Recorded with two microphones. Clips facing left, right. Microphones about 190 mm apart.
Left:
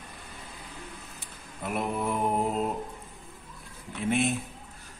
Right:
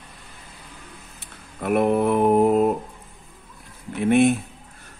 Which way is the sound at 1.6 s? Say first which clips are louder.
Right 11 dB; 65° right (ahead or behind).